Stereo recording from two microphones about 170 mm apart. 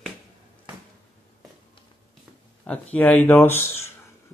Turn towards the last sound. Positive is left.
turn(degrees=15)  # may be behind; listen again after turning